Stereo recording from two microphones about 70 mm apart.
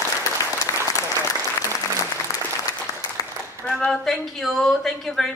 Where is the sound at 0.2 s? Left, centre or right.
Left.